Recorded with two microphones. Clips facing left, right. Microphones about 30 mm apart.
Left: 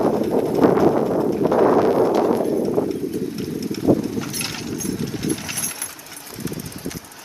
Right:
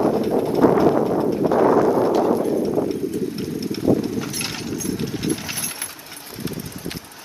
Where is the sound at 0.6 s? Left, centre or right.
Left.